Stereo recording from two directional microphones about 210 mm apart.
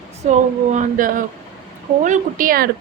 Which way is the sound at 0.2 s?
35° right (ahead or behind).